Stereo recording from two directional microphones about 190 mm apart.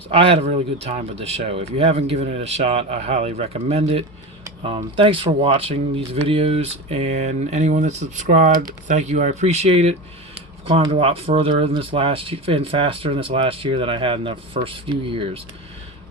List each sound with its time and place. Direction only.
0.1 s speech: 30° right (ahead or behind)